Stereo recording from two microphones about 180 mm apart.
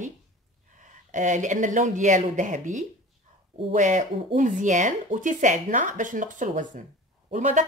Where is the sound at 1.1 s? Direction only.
45° right (ahead or behind).